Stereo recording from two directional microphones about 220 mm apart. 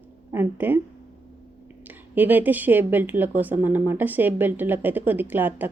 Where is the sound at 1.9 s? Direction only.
10° right (ahead or behind).